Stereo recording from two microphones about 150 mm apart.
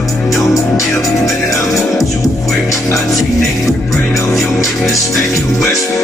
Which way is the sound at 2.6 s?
20° left (ahead or behind).